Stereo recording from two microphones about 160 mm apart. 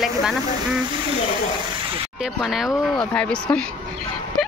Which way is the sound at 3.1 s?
10° left (ahead or behind).